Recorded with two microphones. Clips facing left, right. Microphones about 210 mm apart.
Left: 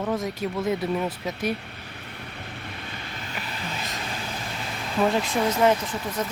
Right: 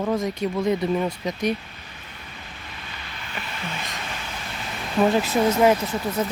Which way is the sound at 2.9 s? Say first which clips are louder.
Left 2 dB; 40° left (ahead or behind).